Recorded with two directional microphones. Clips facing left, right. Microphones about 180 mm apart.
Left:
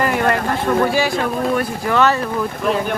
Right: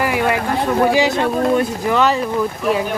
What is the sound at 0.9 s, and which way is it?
Speech, 20° right (ahead or behind).